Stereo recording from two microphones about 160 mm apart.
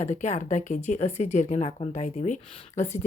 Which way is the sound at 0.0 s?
45° left (ahead or behind).